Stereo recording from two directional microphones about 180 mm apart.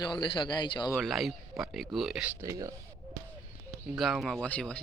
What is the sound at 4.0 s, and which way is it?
Speech, centre (ahead or behind).